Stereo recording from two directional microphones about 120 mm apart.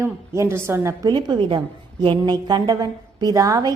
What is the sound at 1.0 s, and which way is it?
A woman's voice, 35° right (ahead or behind).